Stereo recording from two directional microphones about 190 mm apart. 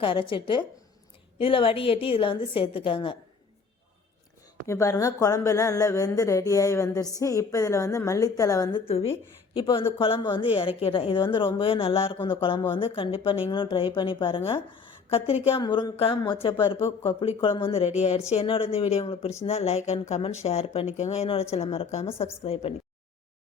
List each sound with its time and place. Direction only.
0.0 s a woman's voice: 25° left (ahead or behind)
4.6 s a woman's voice: 15° left (ahead or behind)
8.9 s a woman's voice: 30° left (ahead or behind)